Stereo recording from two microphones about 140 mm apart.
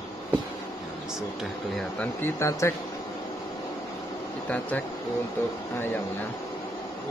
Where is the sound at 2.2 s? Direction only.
20° left (ahead or behind).